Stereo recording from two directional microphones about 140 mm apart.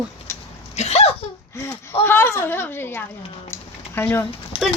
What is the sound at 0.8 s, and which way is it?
Speech, 50° left (ahead or behind).